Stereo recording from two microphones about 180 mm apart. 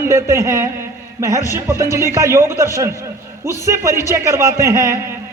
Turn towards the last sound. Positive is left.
turn(degrees=-15)  # may be behind; listen again after turning